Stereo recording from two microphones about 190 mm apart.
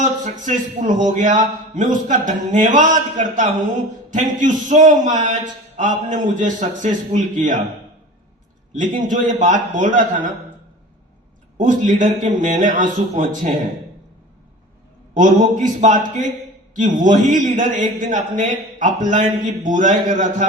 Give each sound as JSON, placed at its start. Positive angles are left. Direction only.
{"t": 0.0, "sound": "a man's voice", "side_deg": -40}
{"t": 8.7, "sound": "a man's voice", "side_deg": -40}
{"t": 11.5, "sound": "a man's voice", "side_deg": -40}
{"t": 15.1, "sound": "a man's voice", "side_deg": -40}